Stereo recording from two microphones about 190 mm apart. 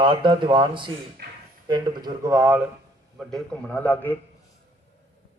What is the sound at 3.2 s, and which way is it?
Speech, 5° left (ahead or behind).